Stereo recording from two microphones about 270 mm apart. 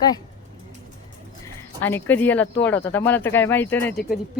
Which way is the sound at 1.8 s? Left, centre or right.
Centre.